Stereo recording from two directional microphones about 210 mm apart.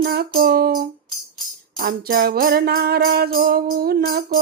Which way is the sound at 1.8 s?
45° right (ahead or behind).